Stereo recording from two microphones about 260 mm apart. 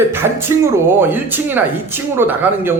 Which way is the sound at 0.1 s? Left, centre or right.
Centre.